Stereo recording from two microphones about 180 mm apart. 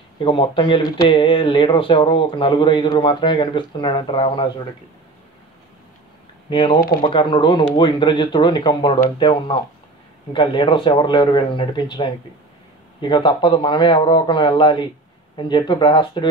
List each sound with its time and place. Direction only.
0.2 s speech: 25° left (ahead or behind)
6.5 s speech: 25° left (ahead or behind)